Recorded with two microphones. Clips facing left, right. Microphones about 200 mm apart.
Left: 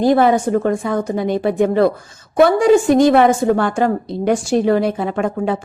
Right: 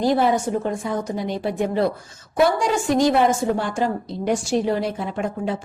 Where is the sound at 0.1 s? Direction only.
60° left (ahead or behind).